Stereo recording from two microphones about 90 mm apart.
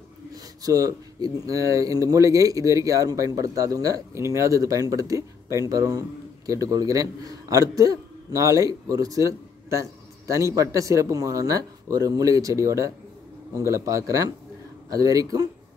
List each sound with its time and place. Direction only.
0.3 s speech: 40° right (ahead or behind)